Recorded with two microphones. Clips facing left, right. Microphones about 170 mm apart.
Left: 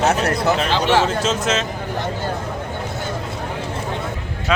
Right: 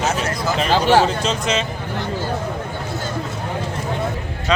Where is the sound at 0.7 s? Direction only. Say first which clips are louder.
Right 6 dB; 40° right (ahead or behind).